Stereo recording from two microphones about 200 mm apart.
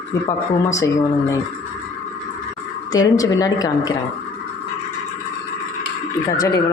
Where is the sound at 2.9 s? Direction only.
20° left (ahead or behind).